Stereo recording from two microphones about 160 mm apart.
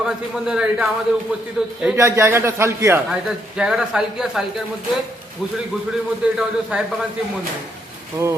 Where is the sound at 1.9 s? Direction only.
15° right (ahead or behind).